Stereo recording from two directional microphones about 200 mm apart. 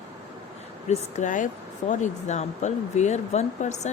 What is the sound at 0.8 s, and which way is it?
Speech, 35° left (ahead or behind).